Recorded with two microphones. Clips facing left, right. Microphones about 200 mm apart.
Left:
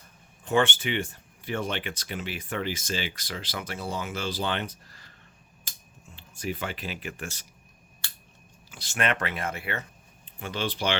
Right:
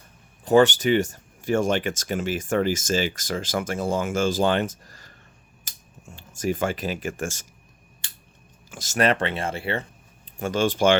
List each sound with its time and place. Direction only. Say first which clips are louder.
0.4 s speech: right 8 dB; 40° right (ahead or behind)
8.0 s scissors: left 2 dB; 15° right (ahead or behind)
8.7 s speech: right 7 dB; 45° right (ahead or behind)
10.3 s speech: right 9 dB; 45° right (ahead or behind)